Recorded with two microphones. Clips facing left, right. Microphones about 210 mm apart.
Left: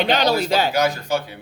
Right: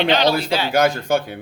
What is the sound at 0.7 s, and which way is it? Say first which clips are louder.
Speech: right 3 dB; 55° right (ahead or behind).